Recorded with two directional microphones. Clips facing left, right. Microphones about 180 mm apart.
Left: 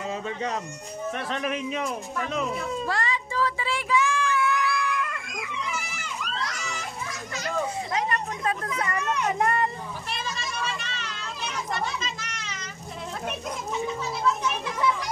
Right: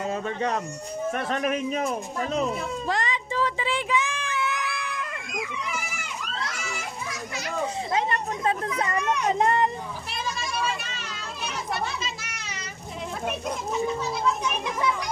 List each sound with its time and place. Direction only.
0.0 s speech: 55° right (ahead or behind)
1.1 s speech: 45° right (ahead or behind)
2.9 s music: 20° right (ahead or behind)
7.9 s speech: 25° right (ahead or behind)
10.2 s children playing: 10° right (ahead or behind)
14.2 s a child's voice: 15° right (ahead or behind)